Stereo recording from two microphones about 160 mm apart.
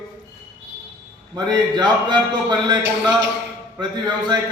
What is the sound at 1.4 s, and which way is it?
A man's voice, 25° right (ahead or behind).